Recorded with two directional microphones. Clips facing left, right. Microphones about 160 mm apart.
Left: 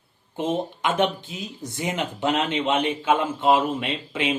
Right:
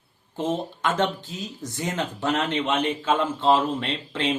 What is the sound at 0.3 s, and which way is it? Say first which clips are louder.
Speech: left 1 dB; 15° left (ahead or behind).